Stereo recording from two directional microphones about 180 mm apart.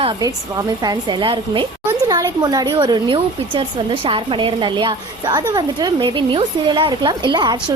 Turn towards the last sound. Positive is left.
turn(degrees=-25)  # may be behind; listen again after turning